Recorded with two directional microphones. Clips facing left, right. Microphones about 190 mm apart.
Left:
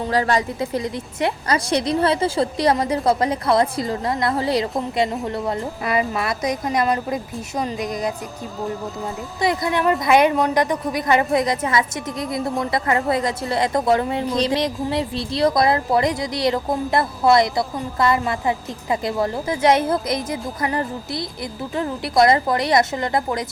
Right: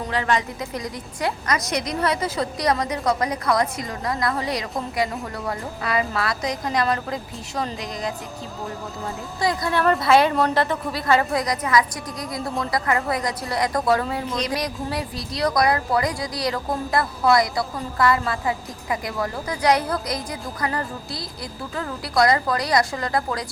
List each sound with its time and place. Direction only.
0.0 s speech: 35° left (ahead or behind); by 7.7 s 20° left (ahead or behind)
9.4 s a woman's voice: 20° left (ahead or behind)